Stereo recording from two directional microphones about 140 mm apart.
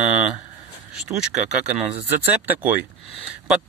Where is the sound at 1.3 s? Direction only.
60° right (ahead or behind).